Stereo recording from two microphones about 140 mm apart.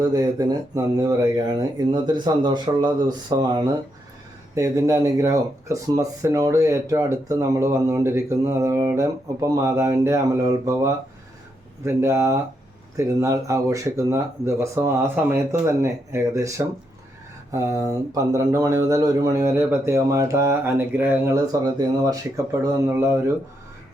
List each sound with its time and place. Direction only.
0.0 s speech: 25° right (ahead or behind)